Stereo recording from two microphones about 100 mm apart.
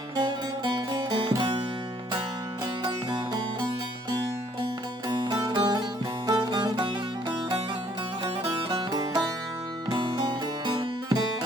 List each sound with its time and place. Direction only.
0.2 s music: 45° right (ahead or behind)
2.8 s music: 45° right (ahead or behind)
5.0 s music: 50° right (ahead or behind)
8.7 s music: 40° right (ahead or behind)